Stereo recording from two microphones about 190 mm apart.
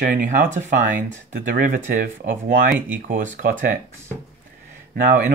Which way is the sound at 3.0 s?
45° right (ahead or behind).